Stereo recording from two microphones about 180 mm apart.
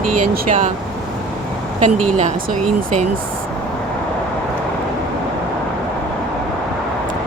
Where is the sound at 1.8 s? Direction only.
40° right (ahead or behind).